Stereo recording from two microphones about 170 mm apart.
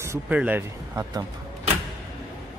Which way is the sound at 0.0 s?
10° right (ahead or behind).